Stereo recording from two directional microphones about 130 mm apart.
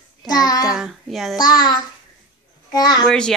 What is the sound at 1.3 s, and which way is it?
Child singing, 30° left (ahead or behind).